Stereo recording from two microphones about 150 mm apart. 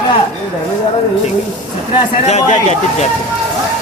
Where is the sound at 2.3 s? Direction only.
50° left (ahead or behind).